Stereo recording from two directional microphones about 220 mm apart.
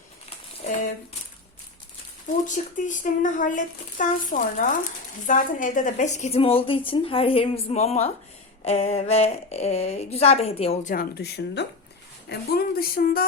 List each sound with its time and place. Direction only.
2.7 s a woman's voice: 35° left (ahead or behind)
10.9 s speech: 45° left (ahead or behind)